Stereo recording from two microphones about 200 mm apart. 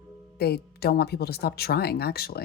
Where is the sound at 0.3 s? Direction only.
50° left (ahead or behind).